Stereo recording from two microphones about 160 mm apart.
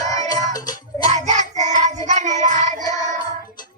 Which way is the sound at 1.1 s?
45° right (ahead or behind).